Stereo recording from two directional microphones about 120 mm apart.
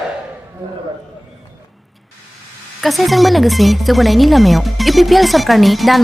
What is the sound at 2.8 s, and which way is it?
Speech, centre (ahead or behind).